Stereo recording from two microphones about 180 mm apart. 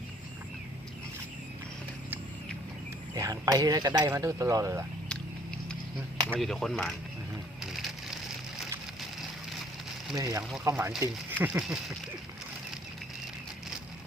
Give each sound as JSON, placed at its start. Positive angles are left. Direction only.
{"t": 3.2, "sound": "speech", "side_deg": -20}
{"t": 6.4, "sound": "speech", "side_deg": 0}
{"t": 10.2, "sound": "speech", "side_deg": -20}